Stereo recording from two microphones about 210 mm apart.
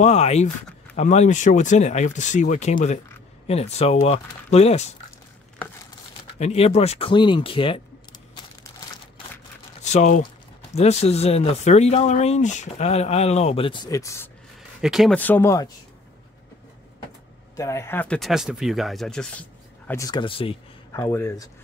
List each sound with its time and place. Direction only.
0.0 s speech: 30° left (ahead or behind)
6.3 s speech: 30° left (ahead or behind)
9.8 s speech: 35° left (ahead or behind); by 14.3 s 15° left (ahead or behind)
14.8 s speech: centre (ahead or behind); by 15.7 s 15° left (ahead or behind)
17.6 s speech: 15° left (ahead or behind)
19.9 s speech: 15° left (ahead or behind)
20.9 s speech: 15° left (ahead or behind)